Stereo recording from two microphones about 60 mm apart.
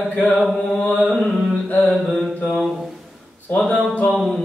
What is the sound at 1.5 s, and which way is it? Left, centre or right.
Carnatic music, left.